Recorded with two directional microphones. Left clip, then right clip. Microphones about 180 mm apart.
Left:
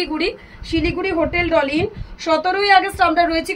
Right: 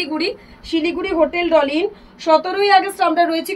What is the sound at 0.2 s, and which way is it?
A woman's voice, 15° left (ahead or behind).